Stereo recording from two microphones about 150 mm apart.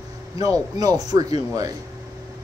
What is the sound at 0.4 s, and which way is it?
A man's voice, 25° right (ahead or behind).